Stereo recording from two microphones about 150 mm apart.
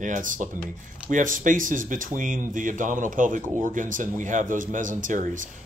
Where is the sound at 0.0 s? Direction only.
60° right (ahead or behind).